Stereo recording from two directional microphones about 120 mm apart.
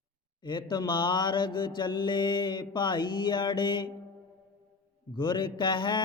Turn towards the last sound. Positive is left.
turn(degrees=40)  # may be behind; listen again after turning